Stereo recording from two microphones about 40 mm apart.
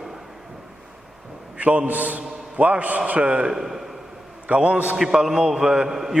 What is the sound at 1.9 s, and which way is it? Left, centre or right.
A man's voice, right.